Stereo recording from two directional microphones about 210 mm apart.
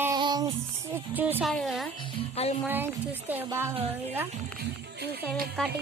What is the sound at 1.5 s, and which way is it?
Speech, centre (ahead or behind).